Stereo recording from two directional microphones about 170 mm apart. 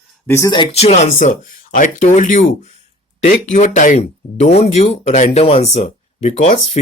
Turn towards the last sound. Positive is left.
turn(degrees=40)  # may be behind; listen again after turning